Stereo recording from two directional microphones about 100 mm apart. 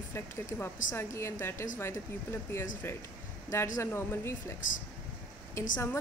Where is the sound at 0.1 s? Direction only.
25° left (ahead or behind).